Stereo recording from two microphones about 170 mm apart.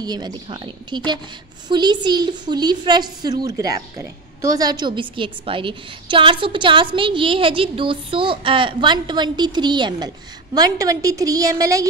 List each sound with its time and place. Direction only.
0.0 s a woman's voice: 25° right (ahead or behind)